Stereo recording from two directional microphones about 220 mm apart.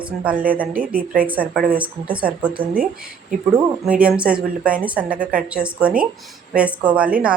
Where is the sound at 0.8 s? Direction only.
40° right (ahead or behind).